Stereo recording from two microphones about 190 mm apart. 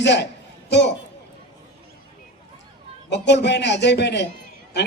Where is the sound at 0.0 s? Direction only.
65° left (ahead or behind).